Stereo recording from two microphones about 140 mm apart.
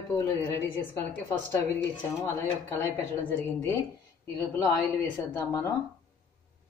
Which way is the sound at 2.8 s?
15° left (ahead or behind).